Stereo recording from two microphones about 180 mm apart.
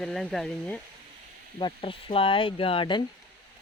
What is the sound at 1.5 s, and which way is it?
Speech, 30° left (ahead or behind).